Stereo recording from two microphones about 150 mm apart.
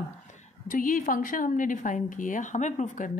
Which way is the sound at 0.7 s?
65° left (ahead or behind).